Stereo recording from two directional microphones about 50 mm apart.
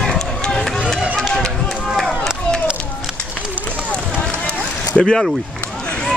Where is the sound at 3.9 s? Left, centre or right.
Left.